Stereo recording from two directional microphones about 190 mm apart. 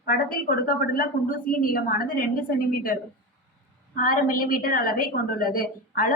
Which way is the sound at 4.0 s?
50° left (ahead or behind).